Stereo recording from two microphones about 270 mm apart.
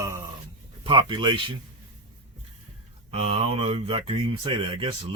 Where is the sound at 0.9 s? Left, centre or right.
Centre.